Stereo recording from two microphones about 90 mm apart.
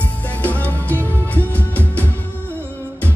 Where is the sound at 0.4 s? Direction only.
15° left (ahead or behind).